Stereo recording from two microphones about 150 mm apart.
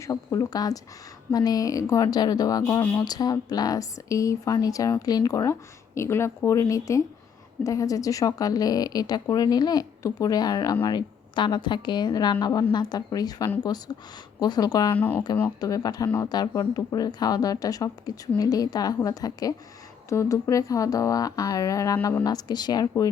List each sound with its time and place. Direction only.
0.0 s speech: 20° left (ahead or behind)
14.9 s speech: 10° left (ahead or behind)
15.6 s speech: 25° left (ahead or behind)